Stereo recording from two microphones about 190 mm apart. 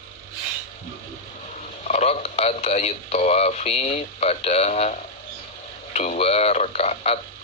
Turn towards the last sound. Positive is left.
turn(degrees=35)  # may be behind; listen again after turning